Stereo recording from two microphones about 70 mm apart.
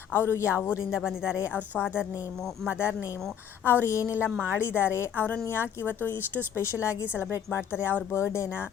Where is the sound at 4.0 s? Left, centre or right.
Right.